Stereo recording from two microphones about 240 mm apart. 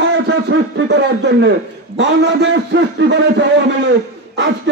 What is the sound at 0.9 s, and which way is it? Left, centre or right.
A man's voice, right.